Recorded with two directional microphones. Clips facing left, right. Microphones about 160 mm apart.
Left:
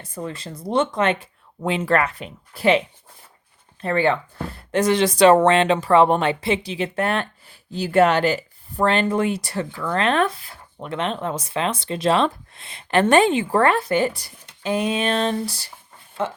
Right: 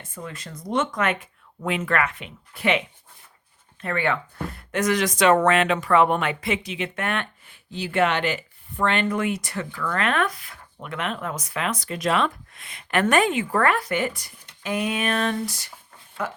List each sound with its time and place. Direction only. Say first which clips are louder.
0.0 s speech: left 6 dB; 35° left (ahead or behind)